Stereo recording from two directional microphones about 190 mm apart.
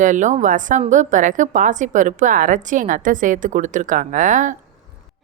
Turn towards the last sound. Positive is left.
turn(degrees=-40)  # may be behind; listen again after turning